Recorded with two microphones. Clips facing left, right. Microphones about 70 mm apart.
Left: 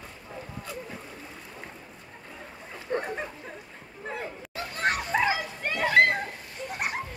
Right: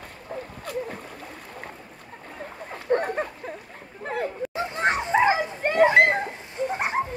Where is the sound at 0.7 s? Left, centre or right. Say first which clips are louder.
Right 9 dB; right.